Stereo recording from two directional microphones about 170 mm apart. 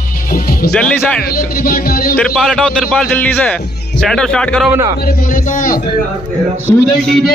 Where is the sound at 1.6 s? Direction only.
60° left (ahead or behind).